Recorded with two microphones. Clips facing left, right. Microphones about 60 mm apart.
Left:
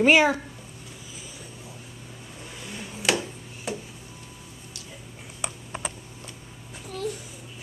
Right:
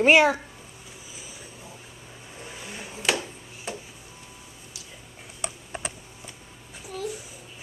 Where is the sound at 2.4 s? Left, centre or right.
Centre.